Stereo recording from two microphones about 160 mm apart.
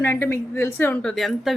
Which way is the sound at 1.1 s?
Centre (ahead or behind).